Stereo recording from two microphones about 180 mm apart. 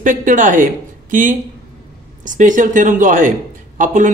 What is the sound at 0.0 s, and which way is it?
Speech, 45° right (ahead or behind).